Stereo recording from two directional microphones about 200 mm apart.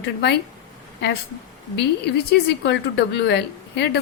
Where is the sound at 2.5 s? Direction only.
55° left (ahead or behind).